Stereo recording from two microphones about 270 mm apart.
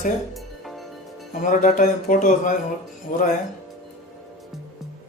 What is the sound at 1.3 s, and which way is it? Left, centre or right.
Speech, left.